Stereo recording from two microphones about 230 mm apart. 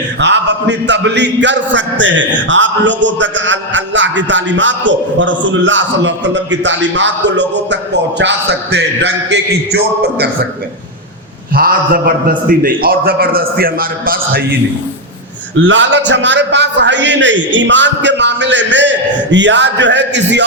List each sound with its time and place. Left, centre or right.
0.2 s a man's voice: right
11.5 s a man's voice: right
15.5 s a man's voice: right